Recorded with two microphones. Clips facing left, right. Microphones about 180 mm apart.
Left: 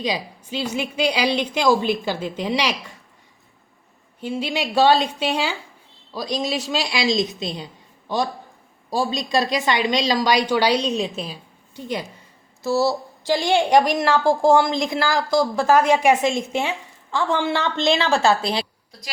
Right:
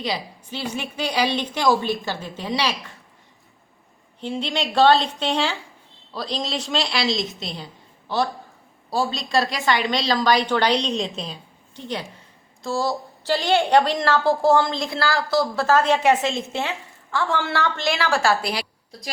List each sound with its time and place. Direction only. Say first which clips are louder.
0.0 s a woman's voice: left 2 dB; 15° left (ahead or behind)
4.2 s a woman's voice: left 1 dB; 5° left (ahead or behind)
12.6 s a woman's voice: left 4 dB; 10° left (ahead or behind)